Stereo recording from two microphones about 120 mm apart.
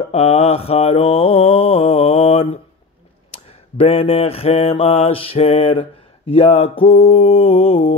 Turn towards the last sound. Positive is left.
turn(degrees=55)  # may be behind; listen again after turning